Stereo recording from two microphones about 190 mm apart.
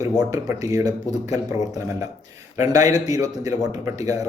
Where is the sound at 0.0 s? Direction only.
15° right (ahead or behind).